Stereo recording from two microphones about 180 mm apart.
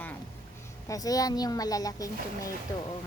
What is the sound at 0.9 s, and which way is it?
A woman's voice, 20° left (ahead or behind).